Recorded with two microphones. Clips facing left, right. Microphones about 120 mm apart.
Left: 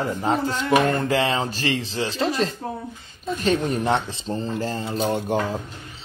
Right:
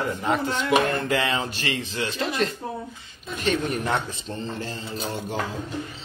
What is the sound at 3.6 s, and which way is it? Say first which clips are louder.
Speech: left 4 dB; 30° left (ahead or behind).